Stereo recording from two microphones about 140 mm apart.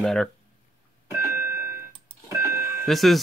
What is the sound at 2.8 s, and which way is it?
Speech, centre (ahead or behind).